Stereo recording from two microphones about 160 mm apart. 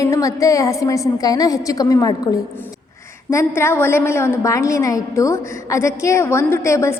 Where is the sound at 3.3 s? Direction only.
15° left (ahead or behind).